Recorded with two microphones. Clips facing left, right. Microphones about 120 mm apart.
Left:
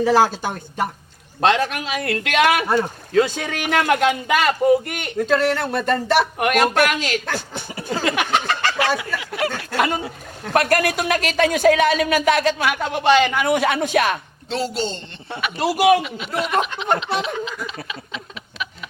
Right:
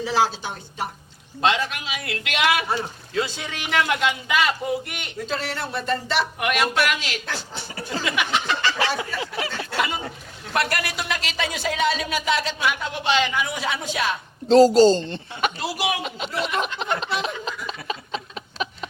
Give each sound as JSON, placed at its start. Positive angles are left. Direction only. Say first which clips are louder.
{"t": 0.0, "sound": "speech", "louder": "left 6 dB", "side_deg": 50}
{"t": 7.9, "sound": "a sound", "louder": "left 5 dB", "side_deg": 50}
{"t": 9.1, "sound": "a sound", "louder": "left 1 dB", "side_deg": -35}
{"t": 9.7, "sound": "speech", "louder": "left 3 dB", "side_deg": 45}
{"t": 14.4, "sound": "speech", "louder": "right 12 dB", "side_deg": -35}
{"t": 15.5, "sound": "speech", "louder": "left 10 dB", "side_deg": 50}
{"t": 16.0, "sound": "speech", "louder": "right 1 dB", "side_deg": -35}
{"t": 16.3, "sound": "speech", "louder": "left 5 dB", "side_deg": 50}